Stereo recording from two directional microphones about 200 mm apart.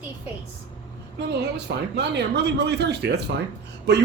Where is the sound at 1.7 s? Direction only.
60° right (ahead or behind).